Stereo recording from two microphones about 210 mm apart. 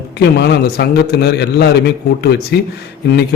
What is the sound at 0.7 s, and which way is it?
Speech, 50° left (ahead or behind).